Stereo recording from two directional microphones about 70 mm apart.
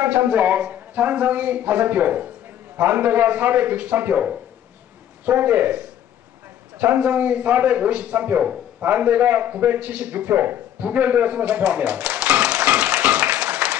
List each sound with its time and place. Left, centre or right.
0.0 s a man's voice: right